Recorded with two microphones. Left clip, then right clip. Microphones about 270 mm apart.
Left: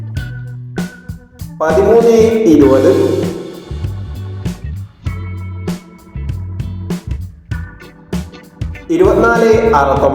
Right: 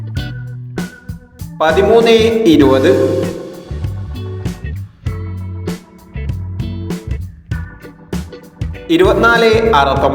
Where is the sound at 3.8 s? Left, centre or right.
Centre.